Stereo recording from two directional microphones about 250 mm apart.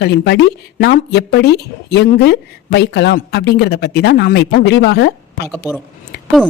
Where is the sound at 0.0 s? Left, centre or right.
Left.